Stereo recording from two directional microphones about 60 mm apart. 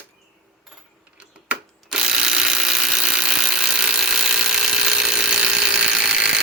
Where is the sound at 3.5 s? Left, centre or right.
Centre.